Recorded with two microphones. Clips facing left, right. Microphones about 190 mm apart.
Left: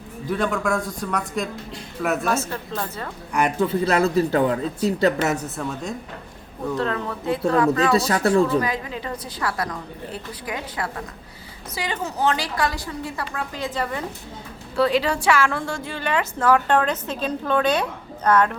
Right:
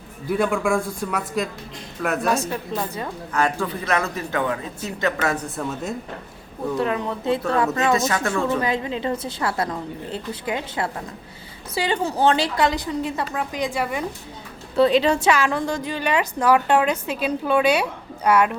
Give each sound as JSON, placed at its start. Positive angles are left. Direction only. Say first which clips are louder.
{"t": 0.3, "sound": "a woman's voice", "louder": "right 2 dB", "side_deg": -10}
{"t": 2.3, "sound": "a woman's voice", "louder": "right 2 dB", "side_deg": -15}
{"t": 3.3, "sound": "a man's voice", "louder": "left 3 dB", "side_deg": 20}
{"t": 5.4, "sound": "speech", "louder": "right 1 dB", "side_deg": 0}
{"t": 6.7, "sound": "a woman's voice", "louder": "right 2 dB", "side_deg": -15}
{"t": 7.9, "sound": "a man's voice", "louder": "left 3 dB", "side_deg": 35}
{"t": 8.4, "sound": "a woman's voice", "louder": "right 1 dB", "side_deg": -25}
{"t": 14.8, "sound": "a woman's voice", "louder": "right 3 dB", "side_deg": -20}